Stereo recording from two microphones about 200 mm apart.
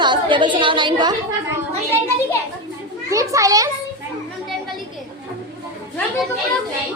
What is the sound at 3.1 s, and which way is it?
Speech, 15° right (ahead or behind).